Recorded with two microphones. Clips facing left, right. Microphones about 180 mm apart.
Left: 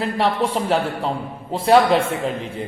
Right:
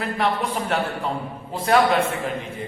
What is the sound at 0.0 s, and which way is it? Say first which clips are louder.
A man's voice: left 3 dB; 30° left (ahead or behind).